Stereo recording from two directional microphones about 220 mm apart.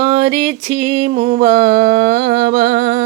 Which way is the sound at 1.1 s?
40° right (ahead or behind).